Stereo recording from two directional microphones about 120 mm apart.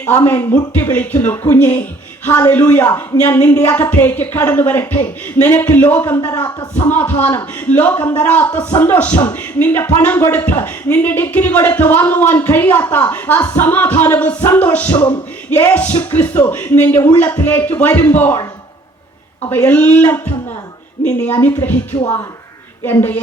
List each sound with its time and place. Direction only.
0.0 s speech: 20° left (ahead or behind)
19.5 s speech: 15° left (ahead or behind)
22.8 s a woman's voice: 20° left (ahead or behind)